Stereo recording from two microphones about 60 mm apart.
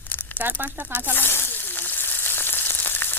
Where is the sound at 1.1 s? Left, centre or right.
Left.